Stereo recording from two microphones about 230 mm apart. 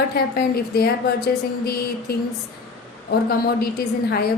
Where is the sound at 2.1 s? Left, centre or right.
Left.